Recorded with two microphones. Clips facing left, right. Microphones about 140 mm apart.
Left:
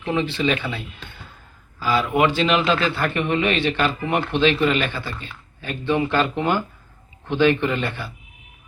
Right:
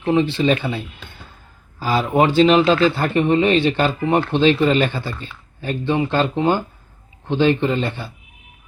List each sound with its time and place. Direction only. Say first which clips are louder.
0.0 s a man's voice: right 5 dB; 35° right (ahead or behind)
1.8 s a man's voice: right 2 dB; 35° right (ahead or behind)